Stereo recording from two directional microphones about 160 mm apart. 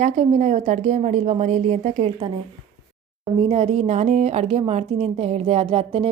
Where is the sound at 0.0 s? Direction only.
45° right (ahead or behind).